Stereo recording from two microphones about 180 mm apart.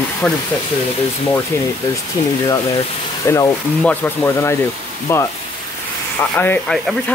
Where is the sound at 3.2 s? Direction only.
15° left (ahead or behind).